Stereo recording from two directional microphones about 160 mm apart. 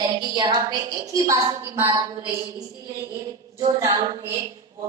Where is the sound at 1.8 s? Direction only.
30° right (ahead or behind).